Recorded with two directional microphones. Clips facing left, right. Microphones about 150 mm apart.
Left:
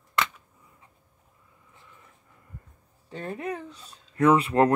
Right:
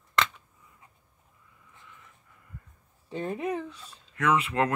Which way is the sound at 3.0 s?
5° right (ahead or behind).